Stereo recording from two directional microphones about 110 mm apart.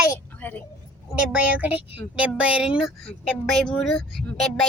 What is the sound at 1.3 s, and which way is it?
A child's voice, 15° right (ahead or behind).